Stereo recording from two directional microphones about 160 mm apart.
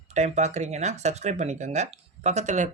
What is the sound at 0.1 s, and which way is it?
Speech, 45° right (ahead or behind).